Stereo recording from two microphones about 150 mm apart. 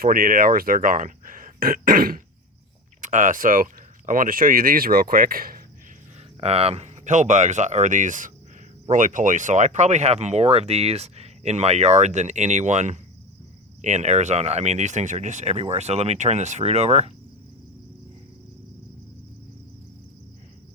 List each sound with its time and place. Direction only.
0.0 s speech: 70° right (ahead or behind)
3.0 s speech: 60° right (ahead or behind); by 5.5 s 75° right (ahead or behind)
6.4 s speech: 40° right (ahead or behind)